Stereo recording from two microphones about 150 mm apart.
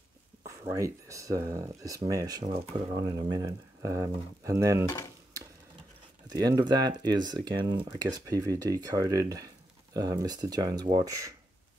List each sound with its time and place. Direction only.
0.4 s speech: 25° right (ahead or behind)
6.2 s speech: 25° right (ahead or behind)